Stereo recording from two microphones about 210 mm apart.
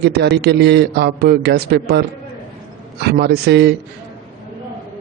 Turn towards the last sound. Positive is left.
turn(degrees=-50)  # may be behind; listen again after turning